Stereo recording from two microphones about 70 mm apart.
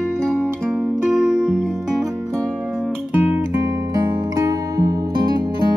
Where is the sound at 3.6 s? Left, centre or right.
Right.